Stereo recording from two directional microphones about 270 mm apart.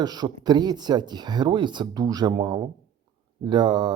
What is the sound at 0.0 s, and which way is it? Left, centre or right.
Speech, centre.